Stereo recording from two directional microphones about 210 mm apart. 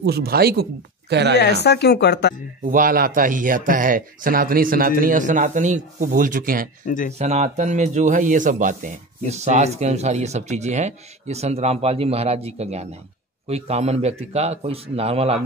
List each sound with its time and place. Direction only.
0.0 s speech: 50° right (ahead or behind)
1.4 s speech: 50° left (ahead or behind)
2.6 s a man's voice: 40° right (ahead or behind)